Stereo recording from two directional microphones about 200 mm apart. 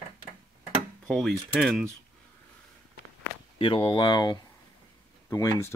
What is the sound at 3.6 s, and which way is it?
Speech, 25° left (ahead or behind).